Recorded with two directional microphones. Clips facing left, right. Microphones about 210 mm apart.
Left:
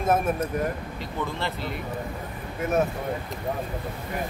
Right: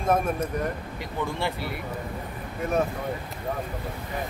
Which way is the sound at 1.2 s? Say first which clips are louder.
Right 2 dB; 15° right (ahead or behind).